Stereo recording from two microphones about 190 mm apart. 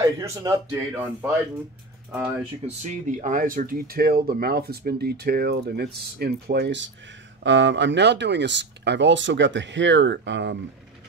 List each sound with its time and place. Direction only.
0.2 s speech: 15° right (ahead or behind)
2.8 s speech: 40° right (ahead or behind); by 10.6 s 70° right (ahead or behind)